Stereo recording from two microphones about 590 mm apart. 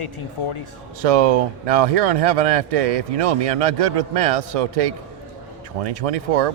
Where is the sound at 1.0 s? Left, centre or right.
Right.